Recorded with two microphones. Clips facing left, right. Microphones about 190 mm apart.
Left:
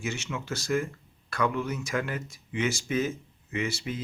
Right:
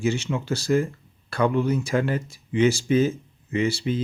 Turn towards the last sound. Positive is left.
turn(degrees=-30)  # may be behind; listen again after turning